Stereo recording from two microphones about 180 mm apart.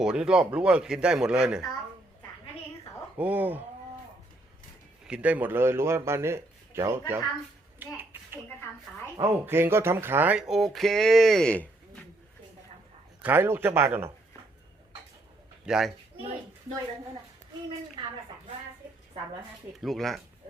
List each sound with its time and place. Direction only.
0.0 s speech: 5° right (ahead or behind)
3.2 s a man's voice: 10° right (ahead or behind)
5.0 s a man's voice: 5° right (ahead or behind)
7.8 s a sound: 10° right (ahead or behind)
9.1 s speech: 15° right (ahead or behind); by 11.7 s 5° left (ahead or behind)
13.2 s a man's voice: 10° right (ahead or behind)
15.6 s speech: 5° right (ahead or behind)
18.0 s a woman's voice: 25° right (ahead or behind)
19.7 s speech: centre (ahead or behind)